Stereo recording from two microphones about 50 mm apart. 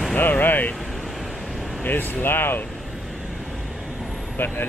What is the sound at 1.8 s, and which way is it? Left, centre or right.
Speech, left.